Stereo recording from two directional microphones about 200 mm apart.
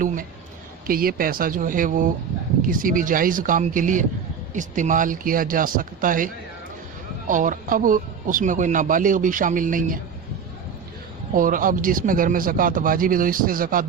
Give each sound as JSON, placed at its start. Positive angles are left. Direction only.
{"t": 0.9, "sound": "a man's voice", "side_deg": -45}
{"t": 11.3, "sound": "a man's voice", "side_deg": -45}